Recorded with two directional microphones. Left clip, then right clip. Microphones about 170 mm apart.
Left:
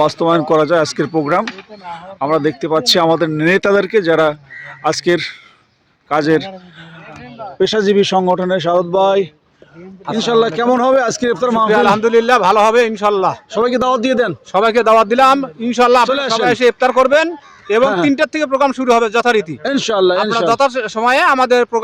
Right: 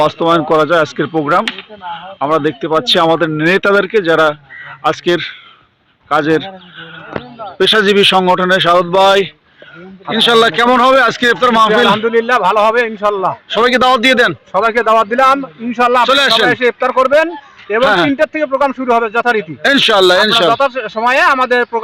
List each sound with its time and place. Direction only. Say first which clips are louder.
0.0 s speech: right 2 dB; 15° left (ahead or behind)
7.6 s speech: right 4 dB; 20° left (ahead or behind)
12.0 s a man's voice: left 1 dB; 35° left (ahead or behind)
13.5 s a man's voice: right 7 dB; centre (ahead or behind)
14.5 s a man's voice: left 2 dB; 35° left (ahead or behind)
16.0 s a man's voice: right 6 dB; centre (ahead or behind)
16.5 s a man's voice: even; 40° left (ahead or behind)
17.8 s a man's voice: right 6 dB; centre (ahead or behind)
18.1 s a man's voice: right 1 dB; 50° left (ahead or behind)
19.6 s a man's voice: right 8 dB; 5° right (ahead or behind)
20.5 s a man's voice: right 1 dB; 45° left (ahead or behind)